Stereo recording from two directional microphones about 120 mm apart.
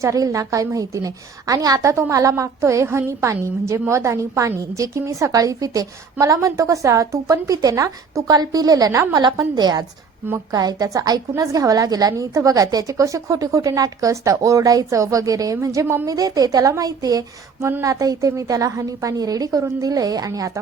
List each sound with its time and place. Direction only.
0.0 s a woman's voice: 25° right (ahead or behind)